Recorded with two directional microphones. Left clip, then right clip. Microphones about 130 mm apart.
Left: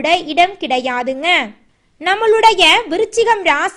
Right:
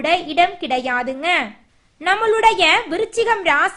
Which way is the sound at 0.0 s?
25° left (ahead or behind).